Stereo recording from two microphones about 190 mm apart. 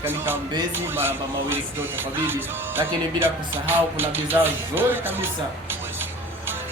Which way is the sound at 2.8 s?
10° right (ahead or behind).